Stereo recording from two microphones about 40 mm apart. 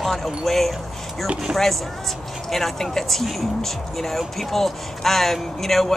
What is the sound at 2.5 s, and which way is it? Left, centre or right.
Speech, centre.